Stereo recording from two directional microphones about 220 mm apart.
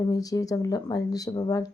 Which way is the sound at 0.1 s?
15° left (ahead or behind).